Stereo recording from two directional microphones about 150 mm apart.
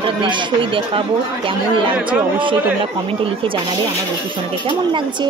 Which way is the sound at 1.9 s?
10° right (ahead or behind).